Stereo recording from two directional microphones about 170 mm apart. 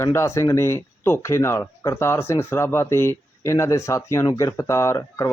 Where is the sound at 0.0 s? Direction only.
15° left (ahead or behind).